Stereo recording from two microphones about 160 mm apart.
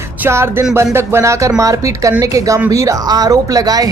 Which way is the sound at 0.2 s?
15° right (ahead or behind).